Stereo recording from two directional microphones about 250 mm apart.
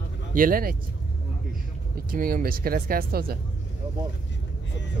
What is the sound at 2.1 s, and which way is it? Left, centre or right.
Speech, right.